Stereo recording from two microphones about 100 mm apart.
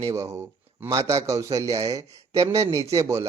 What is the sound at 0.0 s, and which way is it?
Speech, 30° right (ahead or behind).